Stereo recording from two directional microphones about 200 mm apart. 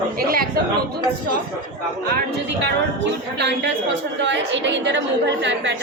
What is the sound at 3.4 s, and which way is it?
A woman's voice, 60° right (ahead or behind).